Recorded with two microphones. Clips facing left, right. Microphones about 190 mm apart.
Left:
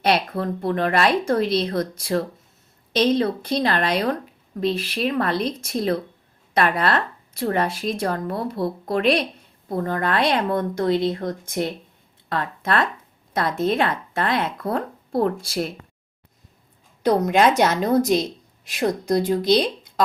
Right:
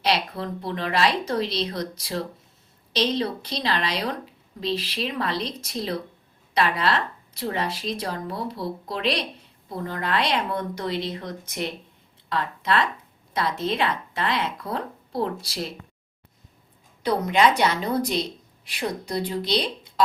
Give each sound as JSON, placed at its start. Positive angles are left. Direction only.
{"t": 0.0, "sound": "speech", "side_deg": 55}
{"t": 17.0, "sound": "speech", "side_deg": 45}